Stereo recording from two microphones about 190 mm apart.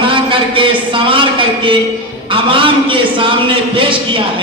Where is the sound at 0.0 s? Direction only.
25° right (ahead or behind).